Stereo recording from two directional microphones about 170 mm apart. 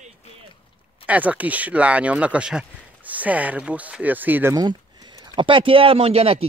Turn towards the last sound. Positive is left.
turn(degrees=-35)  # may be behind; listen again after turning